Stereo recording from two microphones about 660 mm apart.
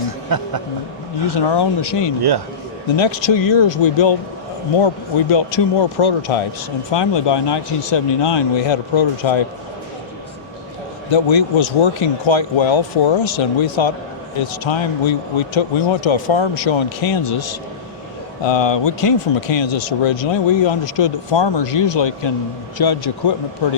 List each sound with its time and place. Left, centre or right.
0.3 s speech: right
1.3 s speech: left
5.3 s speech: left
11.1 s speech: left